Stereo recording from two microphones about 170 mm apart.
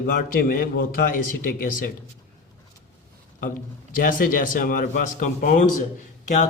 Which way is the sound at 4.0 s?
55° left (ahead or behind).